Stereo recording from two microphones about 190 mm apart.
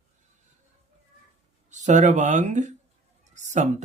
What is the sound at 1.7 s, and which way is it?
Speech, 40° right (ahead or behind).